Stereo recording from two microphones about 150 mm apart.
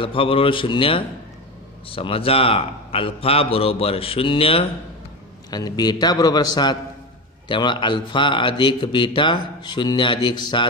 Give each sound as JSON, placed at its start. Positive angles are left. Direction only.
{"t": 0.0, "sound": "a man's voice", "side_deg": 35}
{"t": 5.5, "sound": "a man's voice", "side_deg": 25}